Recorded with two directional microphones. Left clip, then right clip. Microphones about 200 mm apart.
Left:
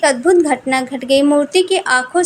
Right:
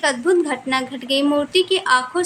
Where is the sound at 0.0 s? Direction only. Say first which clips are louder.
Left 6 dB; 20° left (ahead or behind).